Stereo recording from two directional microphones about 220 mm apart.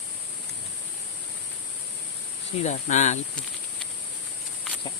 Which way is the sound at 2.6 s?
35° left (ahead or behind).